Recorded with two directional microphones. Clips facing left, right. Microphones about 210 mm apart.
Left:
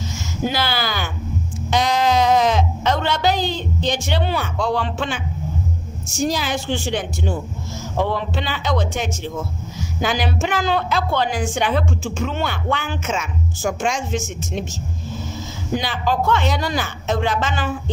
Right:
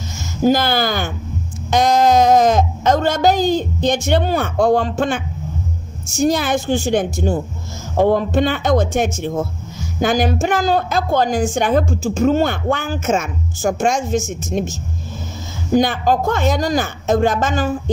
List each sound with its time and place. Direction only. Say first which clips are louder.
0.4 s a woman's voice: right 8 dB; 45° right (ahead or behind)
6.2 s a woman's voice: right 5 dB; 55° right (ahead or behind)
15.7 s a woman's voice: right 7 dB; 45° right (ahead or behind)